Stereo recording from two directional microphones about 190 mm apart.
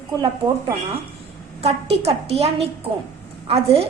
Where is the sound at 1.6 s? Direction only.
35° right (ahead or behind).